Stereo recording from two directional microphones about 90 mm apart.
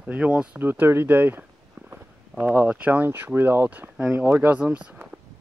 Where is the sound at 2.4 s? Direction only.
20° right (ahead or behind).